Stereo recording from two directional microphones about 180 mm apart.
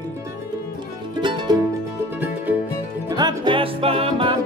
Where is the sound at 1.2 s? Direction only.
25° right (ahead or behind).